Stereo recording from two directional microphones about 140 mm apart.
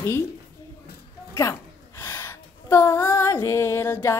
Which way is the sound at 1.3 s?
20° left (ahead or behind).